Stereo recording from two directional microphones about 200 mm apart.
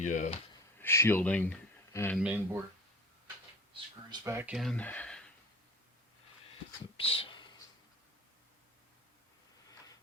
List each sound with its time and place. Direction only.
0.0 s speech: 40° left (ahead or behind)
0.8 s speech: 10° left (ahead or behind)
2.1 s speech: 5° right (ahead or behind)
4.1 s speech: 15° right (ahead or behind)
4.5 s speech: centre (ahead or behind)
6.9 s speech: 30° left (ahead or behind)